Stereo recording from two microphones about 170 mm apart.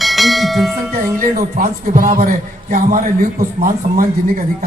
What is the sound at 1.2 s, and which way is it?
Speech, 55° right (ahead or behind).